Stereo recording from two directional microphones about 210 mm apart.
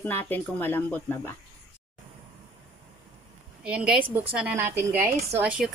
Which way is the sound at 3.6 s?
5° right (ahead or behind).